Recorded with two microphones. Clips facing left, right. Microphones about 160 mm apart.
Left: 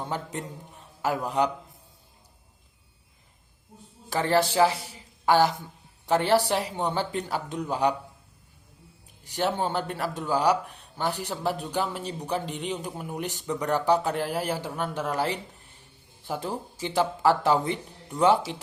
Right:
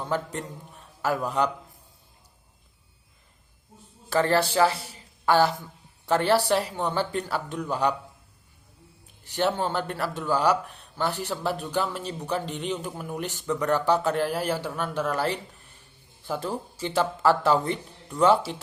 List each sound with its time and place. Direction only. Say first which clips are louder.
0.0 s a man's voice: right 3 dB; 15° left (ahead or behind)
4.1 s a man's voice: right 1 dB; 15° left (ahead or behind)
9.2 s speech: right 1 dB; 15° left (ahead or behind)